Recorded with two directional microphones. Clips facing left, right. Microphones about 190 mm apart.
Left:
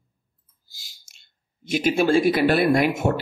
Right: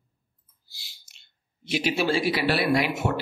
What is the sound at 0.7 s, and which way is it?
Speech, 45° left (ahead or behind).